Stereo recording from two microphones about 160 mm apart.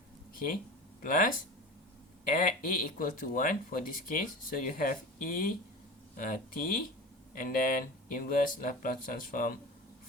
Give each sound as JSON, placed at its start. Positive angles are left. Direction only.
{"t": 1.0, "sound": "speech", "side_deg": 60}